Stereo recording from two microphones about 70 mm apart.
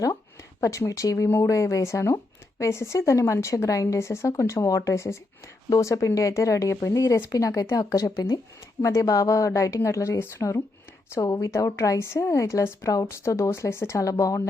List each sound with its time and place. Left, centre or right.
0.6 s a woman's voice: left
11.2 s a woman's voice: left